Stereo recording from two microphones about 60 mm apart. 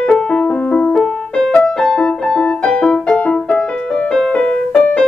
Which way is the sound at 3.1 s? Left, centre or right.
Left.